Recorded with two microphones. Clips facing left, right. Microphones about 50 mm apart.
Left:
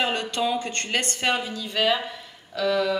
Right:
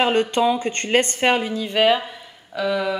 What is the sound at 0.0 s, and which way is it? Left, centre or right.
A woman's voice, right.